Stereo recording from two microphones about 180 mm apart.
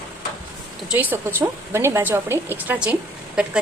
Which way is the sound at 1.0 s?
10° right (ahead or behind).